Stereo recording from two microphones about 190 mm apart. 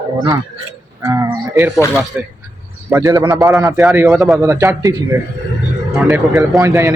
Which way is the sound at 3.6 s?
15° right (ahead or behind).